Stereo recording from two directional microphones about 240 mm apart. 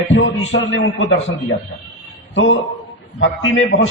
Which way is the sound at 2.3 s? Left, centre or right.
Left.